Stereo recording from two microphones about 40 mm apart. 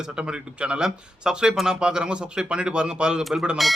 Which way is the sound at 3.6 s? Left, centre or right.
Centre.